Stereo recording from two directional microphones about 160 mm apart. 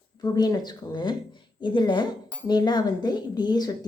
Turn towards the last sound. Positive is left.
turn(degrees=25)  # may be behind; listen again after turning